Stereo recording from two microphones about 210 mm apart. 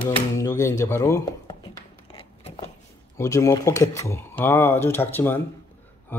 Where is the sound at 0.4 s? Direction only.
15° left (ahead or behind).